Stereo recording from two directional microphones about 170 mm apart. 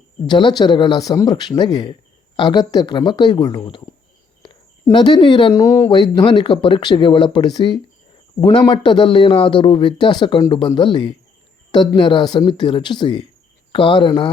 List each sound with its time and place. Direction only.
0.2 s speech: 30° left (ahead or behind)